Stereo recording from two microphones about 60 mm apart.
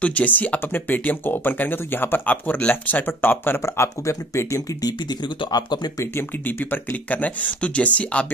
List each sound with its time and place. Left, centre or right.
0.0 s speech: left
6.1 s speech: left